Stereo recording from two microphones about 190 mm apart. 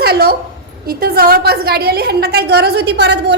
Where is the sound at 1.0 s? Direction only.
55° right (ahead or behind).